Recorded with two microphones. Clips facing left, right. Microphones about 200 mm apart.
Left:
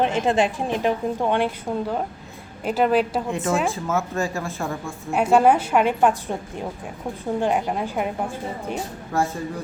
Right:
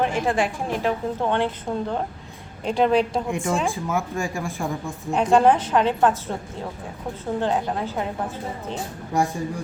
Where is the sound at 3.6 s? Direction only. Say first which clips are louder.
Left 1 dB; 15° right (ahead or behind).